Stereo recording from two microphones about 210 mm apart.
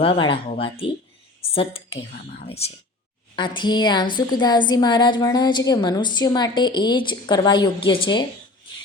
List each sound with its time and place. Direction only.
0.0 s a woman's voice: 25° left (ahead or behind)